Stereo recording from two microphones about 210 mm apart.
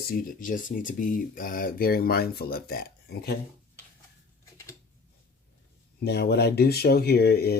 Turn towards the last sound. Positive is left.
turn(degrees=50)  # may be behind; listen again after turning